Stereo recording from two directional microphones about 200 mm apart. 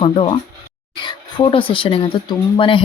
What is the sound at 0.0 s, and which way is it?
A woman's voice, 30° left (ahead or behind).